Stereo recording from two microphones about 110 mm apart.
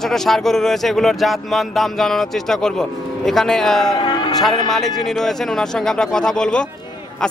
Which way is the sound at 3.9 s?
45° left (ahead or behind).